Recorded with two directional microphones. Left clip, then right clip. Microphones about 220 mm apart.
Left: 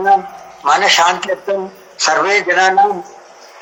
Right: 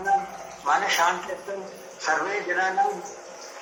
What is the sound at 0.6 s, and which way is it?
A man's voice, 40° left (ahead or behind).